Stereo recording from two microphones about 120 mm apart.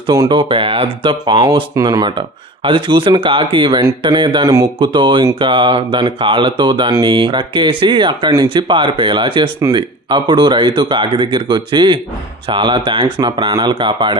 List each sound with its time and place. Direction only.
0.1 s speech: 35° right (ahead or behind)